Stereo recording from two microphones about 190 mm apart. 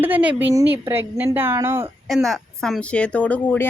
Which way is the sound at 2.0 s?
Centre (ahead or behind).